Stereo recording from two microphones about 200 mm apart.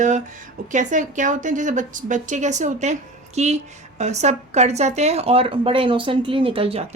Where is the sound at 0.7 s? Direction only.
40° right (ahead or behind).